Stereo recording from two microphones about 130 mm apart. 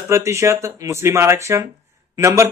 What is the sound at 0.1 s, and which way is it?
Speech, 20° right (ahead or behind).